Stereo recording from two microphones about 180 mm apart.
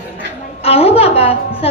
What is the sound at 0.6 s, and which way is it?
A woman's voice, 35° left (ahead or behind).